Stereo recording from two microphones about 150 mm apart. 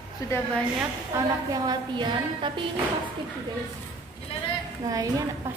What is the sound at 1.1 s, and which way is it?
Speech, 15° right (ahead or behind).